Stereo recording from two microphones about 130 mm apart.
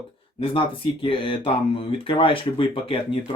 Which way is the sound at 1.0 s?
40° left (ahead or behind).